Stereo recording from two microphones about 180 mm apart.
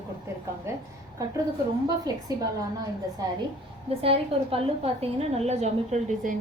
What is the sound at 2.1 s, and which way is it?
A woman's voice, 20° right (ahead or behind).